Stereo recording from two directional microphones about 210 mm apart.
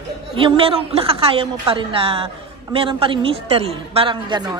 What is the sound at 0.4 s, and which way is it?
A woman's voice, 25° right (ahead or behind).